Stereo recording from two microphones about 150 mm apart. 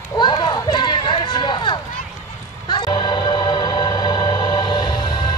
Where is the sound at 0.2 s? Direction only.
30° left (ahead or behind).